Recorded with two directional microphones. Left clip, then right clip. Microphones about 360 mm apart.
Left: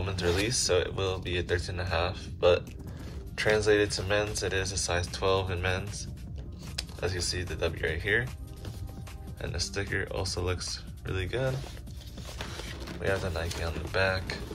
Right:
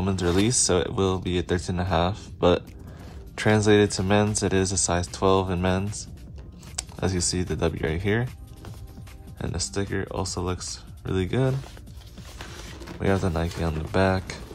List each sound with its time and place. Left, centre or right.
0.0 s speech: centre
6.8 s speech: centre
9.4 s speech: centre
13.9 s speech: centre